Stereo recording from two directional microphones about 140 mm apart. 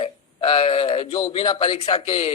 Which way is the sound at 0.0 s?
40° left (ahead or behind).